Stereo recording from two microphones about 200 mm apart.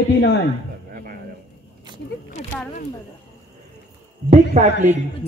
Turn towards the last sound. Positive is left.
turn(degrees=-40)  # may be behind; listen again after turning